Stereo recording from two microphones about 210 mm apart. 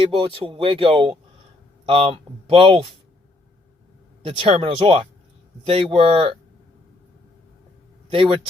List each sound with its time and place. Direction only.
0.2 s speech: 25° right (ahead or behind)
4.3 s speech: 25° right (ahead or behind)
8.1 s speech: 25° right (ahead or behind)